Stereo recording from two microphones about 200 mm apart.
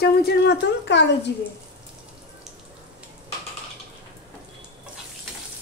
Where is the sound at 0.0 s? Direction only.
55° left (ahead or behind).